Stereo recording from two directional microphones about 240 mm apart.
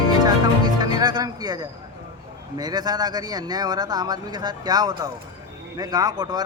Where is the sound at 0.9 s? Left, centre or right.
Centre.